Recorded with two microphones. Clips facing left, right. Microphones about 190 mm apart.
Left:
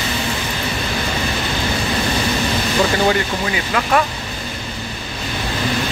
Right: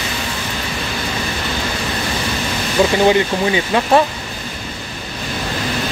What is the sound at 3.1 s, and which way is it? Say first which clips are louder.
Speech: right 4 dB; 25° right (ahead or behind).